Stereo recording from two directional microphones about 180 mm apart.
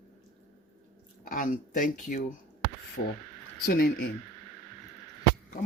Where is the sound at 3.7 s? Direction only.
55° left (ahead or behind).